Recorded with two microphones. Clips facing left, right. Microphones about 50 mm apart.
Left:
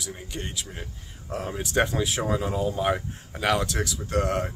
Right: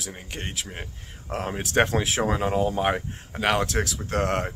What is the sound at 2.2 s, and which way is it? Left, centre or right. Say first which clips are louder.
Speech: right 2 dB; right.